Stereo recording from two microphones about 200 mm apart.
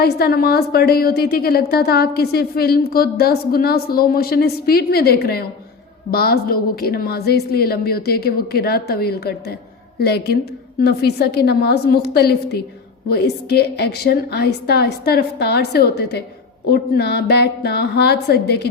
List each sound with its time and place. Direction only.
0.0 s a woman's voice: 50° left (ahead or behind)